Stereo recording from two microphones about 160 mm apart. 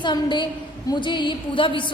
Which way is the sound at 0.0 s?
30° left (ahead or behind).